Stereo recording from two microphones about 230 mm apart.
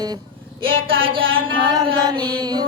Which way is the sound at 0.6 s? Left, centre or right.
Right.